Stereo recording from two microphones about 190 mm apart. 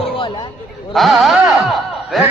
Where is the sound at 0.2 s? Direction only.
25° left (ahead or behind).